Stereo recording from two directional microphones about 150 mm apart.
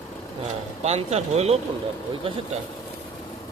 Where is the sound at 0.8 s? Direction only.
45° right (ahead or behind).